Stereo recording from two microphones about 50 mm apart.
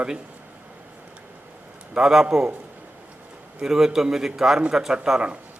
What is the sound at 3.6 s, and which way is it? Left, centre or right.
A man's voice, centre.